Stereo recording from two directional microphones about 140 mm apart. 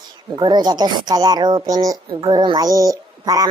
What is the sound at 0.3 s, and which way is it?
A woman's voice, 30° right (ahead or behind).